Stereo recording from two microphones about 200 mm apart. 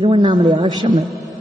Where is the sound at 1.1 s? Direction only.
Centre (ahead or behind).